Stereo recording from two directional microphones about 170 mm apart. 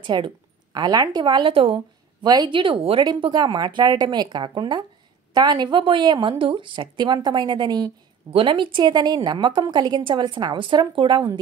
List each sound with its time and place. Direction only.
0.0 s a woman's voice: 30° right (ahead or behind)